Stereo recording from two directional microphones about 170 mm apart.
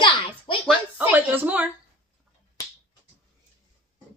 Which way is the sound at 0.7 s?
10° right (ahead or behind).